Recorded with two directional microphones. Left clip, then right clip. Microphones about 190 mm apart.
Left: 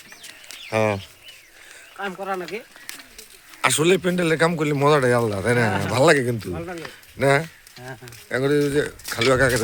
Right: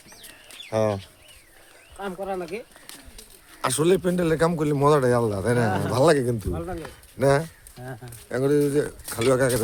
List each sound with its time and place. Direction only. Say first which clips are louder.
0.7 s speech: left 2 dB; 20° left (ahead or behind)
2.2 s a sound: even; 10° right (ahead or behind)
3.6 s speech: left 3 dB; 15° left (ahead or behind)
6.5 s speech: left 1 dB; 5° right (ahead or behind)